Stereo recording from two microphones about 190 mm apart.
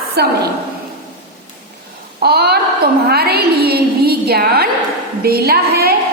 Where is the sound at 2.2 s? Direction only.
55° right (ahead or behind).